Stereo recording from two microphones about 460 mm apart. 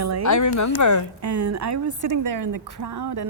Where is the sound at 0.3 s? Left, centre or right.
Left.